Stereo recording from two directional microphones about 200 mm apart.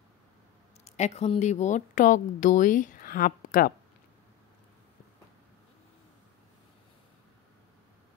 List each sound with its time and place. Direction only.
0.8 s speech: 35° left (ahead or behind)